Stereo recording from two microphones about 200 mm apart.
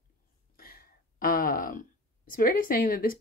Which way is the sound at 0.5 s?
45° left (ahead or behind).